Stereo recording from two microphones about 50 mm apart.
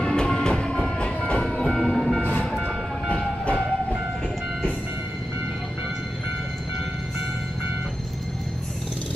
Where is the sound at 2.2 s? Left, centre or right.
Left.